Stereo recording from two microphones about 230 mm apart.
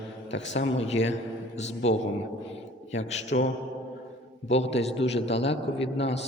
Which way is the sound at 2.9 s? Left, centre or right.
Left.